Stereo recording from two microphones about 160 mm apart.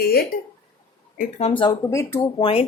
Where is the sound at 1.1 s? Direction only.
50° left (ahead or behind).